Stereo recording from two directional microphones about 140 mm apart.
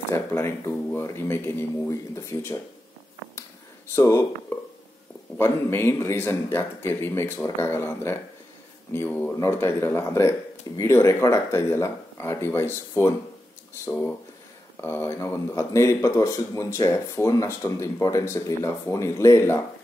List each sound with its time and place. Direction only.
0.1 s speech: 20° left (ahead or behind)
3.9 s speech: 20° left (ahead or behind)